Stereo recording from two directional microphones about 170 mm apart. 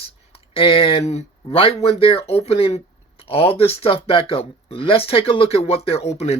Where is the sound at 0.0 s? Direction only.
35° left (ahead or behind).